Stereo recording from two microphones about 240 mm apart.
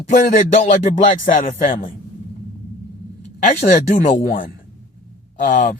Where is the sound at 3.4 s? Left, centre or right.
Left.